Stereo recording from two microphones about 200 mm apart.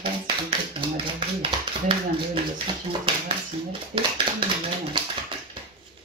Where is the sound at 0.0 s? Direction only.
25° right (ahead or behind).